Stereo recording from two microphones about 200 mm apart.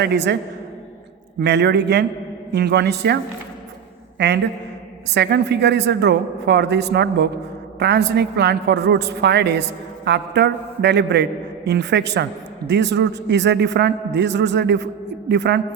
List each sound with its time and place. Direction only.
0.0 s a woman's voice: 55° right (ahead or behind)
1.4 s a woman's voice: 60° right (ahead or behind)
4.2 s a woman's voice: 60° right (ahead or behind)